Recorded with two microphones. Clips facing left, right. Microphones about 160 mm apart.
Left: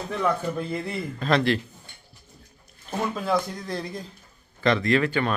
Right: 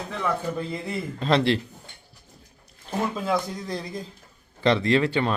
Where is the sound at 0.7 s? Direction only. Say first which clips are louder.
Left 1 dB; 25° right (ahead or behind).